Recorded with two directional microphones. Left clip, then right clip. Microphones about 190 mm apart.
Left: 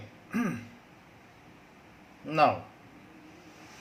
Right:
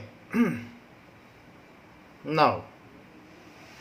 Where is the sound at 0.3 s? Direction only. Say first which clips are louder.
Right 6 dB; 40° right (ahead or behind).